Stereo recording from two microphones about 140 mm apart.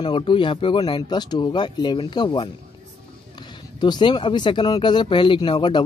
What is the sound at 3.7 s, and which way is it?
Speech, 30° left (ahead or behind).